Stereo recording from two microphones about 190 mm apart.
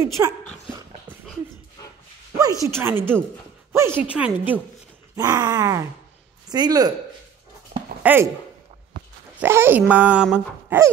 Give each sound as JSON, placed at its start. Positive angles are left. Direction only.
{"t": 0.2, "sound": "speech", "side_deg": -15}
{"t": 0.7, "sound": "dog", "side_deg": -20}
{"t": 2.6, "sound": "speech", "side_deg": -10}
{"t": 5.1, "sound": "groan", "side_deg": -20}
{"t": 8.0, "sound": "speech", "side_deg": -10}
{"t": 9.4, "sound": "speech", "side_deg": -10}